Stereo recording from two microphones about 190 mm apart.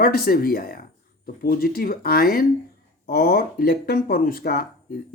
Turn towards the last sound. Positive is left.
turn(degrees=50)  # may be behind; listen again after turning